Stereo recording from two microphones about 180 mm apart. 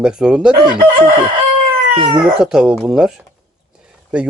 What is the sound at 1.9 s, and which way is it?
Speech, 30° right (ahead or behind).